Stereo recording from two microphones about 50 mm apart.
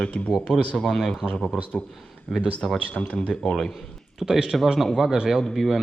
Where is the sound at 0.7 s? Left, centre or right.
Centre.